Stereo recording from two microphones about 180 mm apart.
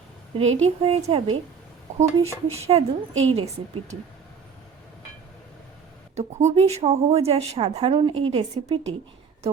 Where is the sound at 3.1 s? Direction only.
90° right.